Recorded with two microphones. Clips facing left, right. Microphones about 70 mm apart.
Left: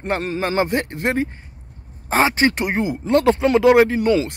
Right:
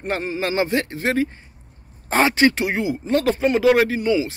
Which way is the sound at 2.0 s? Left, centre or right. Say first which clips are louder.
Even; left.